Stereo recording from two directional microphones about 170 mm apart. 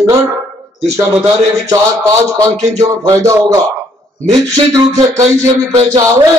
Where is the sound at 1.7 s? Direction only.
20° right (ahead or behind).